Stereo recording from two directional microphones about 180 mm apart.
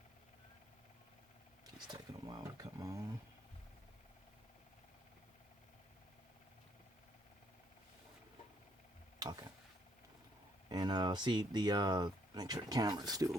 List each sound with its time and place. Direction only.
1.6 s speech: 25° right (ahead or behind)
9.1 s mechanisms: 20° right (ahead or behind)
10.7 s speech: 25° right (ahead or behind)